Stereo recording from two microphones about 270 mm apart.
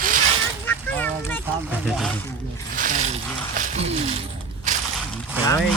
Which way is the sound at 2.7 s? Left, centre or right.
Right.